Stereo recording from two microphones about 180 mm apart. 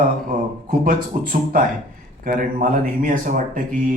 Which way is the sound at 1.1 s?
50° right (ahead or behind).